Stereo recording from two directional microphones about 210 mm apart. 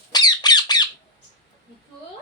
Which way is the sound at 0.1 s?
20° left (ahead or behind).